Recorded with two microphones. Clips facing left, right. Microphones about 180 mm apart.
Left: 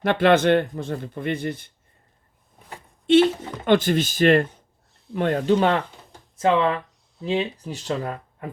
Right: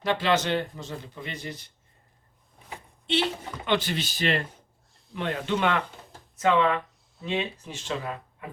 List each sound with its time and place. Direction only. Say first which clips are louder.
0.0 s speech: left 7 dB; 55° left (ahead or behind)
3.1 s speech: left 11 dB; 50° left (ahead or behind)